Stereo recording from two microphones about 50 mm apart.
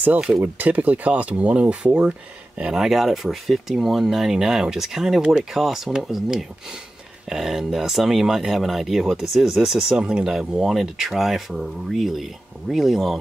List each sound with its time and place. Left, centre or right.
0.4 s speech: right
2.6 s speech: centre